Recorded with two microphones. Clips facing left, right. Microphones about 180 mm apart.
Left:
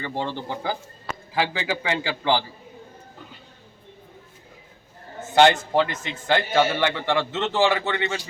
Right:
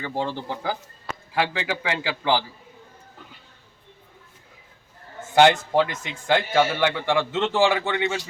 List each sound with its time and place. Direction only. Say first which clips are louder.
0.0 s a man's voice: right 1 dB; 10° right (ahead or behind)
5.3 s a man's voice: even; 10° right (ahead or behind)